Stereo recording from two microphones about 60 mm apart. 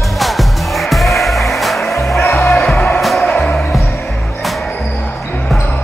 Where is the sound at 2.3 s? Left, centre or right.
Left.